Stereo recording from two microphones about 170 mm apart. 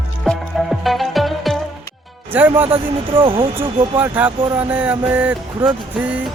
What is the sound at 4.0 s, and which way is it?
Speech, 10° right (ahead or behind).